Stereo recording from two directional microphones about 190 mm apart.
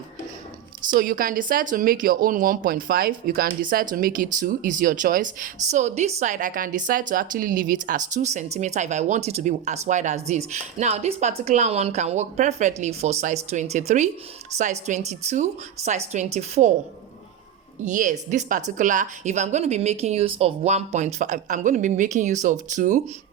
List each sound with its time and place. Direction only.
0.9 s speech: 50° right (ahead or behind)
17.8 s speech: 40° right (ahead or behind)